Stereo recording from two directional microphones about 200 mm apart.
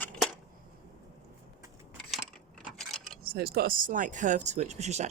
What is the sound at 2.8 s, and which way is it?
Keys jangling, centre (ahead or behind).